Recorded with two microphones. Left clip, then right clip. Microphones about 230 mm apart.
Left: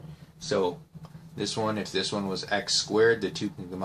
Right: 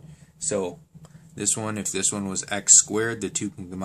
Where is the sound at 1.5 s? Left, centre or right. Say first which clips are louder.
Left 1 dB; right.